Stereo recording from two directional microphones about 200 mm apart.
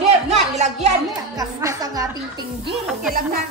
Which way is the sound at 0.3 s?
35° right (ahead or behind).